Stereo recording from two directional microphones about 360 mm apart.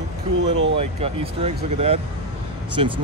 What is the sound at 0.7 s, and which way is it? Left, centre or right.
Speech, centre.